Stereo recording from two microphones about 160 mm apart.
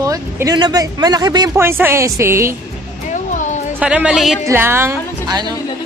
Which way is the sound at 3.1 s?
50° left (ahead or behind).